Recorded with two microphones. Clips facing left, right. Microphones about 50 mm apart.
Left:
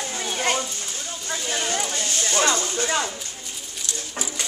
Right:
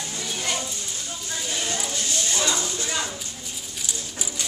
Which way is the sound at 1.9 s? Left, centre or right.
Left.